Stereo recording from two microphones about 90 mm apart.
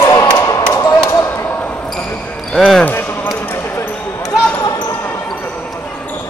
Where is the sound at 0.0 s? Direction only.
45° left (ahead or behind).